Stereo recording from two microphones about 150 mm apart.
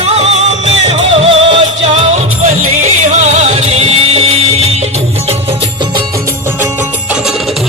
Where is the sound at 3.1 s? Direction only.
50° right (ahead or behind).